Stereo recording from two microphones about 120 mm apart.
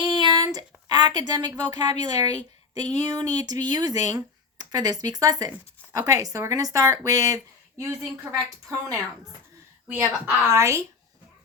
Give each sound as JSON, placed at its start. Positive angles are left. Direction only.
{"t": 0.0, "sound": "speech", "side_deg": -40}
{"t": 7.8, "sound": "speech", "side_deg": -20}
{"t": 9.9, "sound": "speech", "side_deg": -20}